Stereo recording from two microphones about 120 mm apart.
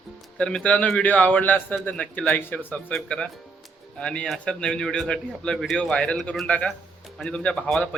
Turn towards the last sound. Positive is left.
turn(degrees=10)  # may be behind; listen again after turning